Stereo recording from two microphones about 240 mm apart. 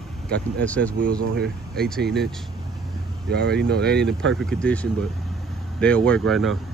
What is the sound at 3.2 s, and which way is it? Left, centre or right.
Speech, right.